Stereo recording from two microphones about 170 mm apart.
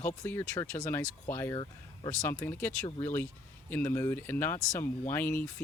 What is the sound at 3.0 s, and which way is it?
Speech, 15° left (ahead or behind).